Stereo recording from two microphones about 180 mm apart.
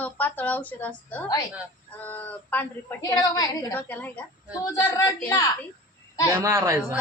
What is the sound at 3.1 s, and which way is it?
Speech, 20° left (ahead or behind).